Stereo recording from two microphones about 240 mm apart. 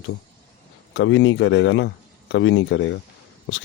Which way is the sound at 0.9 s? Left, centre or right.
Left.